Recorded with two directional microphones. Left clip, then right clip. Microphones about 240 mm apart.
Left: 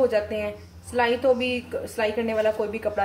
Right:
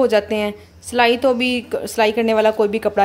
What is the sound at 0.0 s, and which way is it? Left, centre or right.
A woman's voice, right.